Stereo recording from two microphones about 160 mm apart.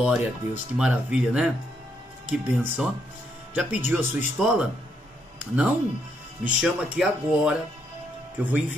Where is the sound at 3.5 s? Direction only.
5° right (ahead or behind).